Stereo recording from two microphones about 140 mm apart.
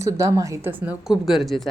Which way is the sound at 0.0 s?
20° right (ahead or behind).